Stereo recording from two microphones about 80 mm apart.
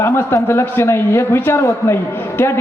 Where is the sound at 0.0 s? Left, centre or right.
Left.